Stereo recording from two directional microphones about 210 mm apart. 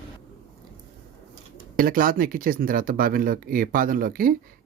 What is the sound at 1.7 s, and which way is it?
Speech, 40° right (ahead or behind).